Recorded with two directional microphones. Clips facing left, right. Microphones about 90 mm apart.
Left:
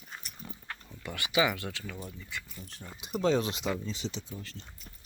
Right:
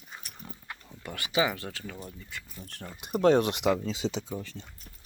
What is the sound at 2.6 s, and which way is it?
Speech, 60° right (ahead or behind).